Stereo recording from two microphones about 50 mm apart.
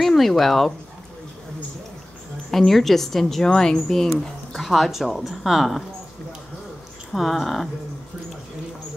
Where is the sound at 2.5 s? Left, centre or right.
Centre.